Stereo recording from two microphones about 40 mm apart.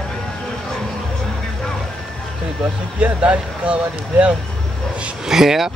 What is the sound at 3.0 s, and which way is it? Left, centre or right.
Speech, right.